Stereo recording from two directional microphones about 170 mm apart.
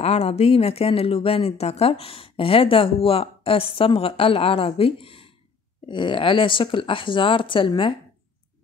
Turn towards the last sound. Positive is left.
turn(degrees=30)  # may be behind; listen again after turning